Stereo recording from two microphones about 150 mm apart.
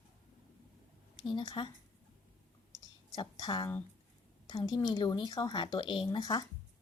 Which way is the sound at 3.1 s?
30° left (ahead or behind).